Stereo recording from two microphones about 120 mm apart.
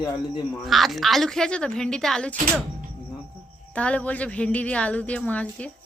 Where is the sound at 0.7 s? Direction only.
Centre (ahead or behind).